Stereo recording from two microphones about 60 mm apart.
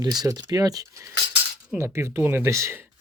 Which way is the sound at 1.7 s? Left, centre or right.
Right.